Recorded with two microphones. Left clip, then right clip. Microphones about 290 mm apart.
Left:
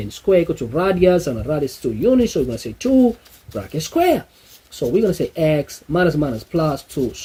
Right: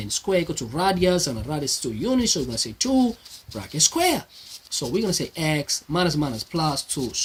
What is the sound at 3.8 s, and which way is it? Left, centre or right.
Speech, right.